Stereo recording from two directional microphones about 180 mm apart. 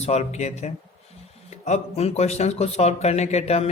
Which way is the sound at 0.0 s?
35° left (ahead or behind).